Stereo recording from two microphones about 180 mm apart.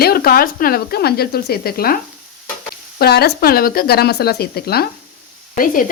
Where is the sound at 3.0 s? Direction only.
60° left (ahead or behind).